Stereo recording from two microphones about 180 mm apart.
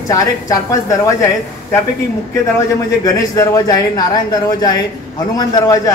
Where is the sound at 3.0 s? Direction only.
20° left (ahead or behind).